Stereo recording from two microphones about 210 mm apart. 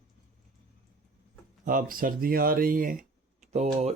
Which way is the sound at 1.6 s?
40° right (ahead or behind).